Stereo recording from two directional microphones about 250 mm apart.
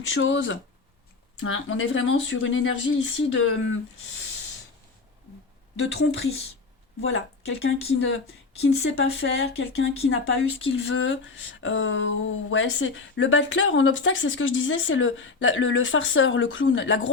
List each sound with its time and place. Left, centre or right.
0.1 s speech: left
5.8 s speech: left